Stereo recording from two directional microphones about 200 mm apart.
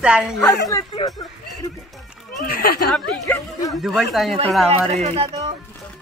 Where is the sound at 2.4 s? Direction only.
50° left (ahead or behind).